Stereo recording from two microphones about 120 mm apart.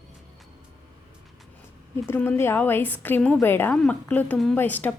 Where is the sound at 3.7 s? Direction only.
5° left (ahead or behind).